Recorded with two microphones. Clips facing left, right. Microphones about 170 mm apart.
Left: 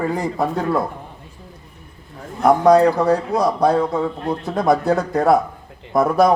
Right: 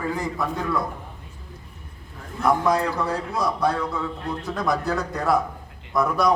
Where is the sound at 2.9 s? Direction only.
60° left (ahead or behind).